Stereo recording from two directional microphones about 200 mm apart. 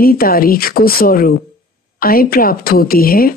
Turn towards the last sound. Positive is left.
turn(degrees=50)  # may be behind; listen again after turning